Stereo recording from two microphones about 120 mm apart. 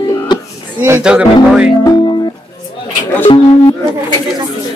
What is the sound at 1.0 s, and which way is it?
Speech, 5° right (ahead or behind).